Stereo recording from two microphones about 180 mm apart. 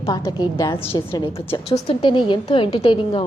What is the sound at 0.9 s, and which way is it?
A woman's voice, 30° left (ahead or behind).